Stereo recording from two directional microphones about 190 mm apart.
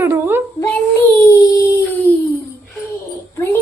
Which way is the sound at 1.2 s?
15° left (ahead or behind).